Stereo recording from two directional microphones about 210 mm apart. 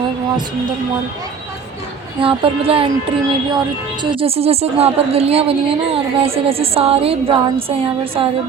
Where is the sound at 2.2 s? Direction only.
25° right (ahead or behind).